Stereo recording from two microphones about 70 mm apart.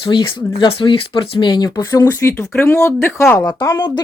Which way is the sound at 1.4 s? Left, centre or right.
Left.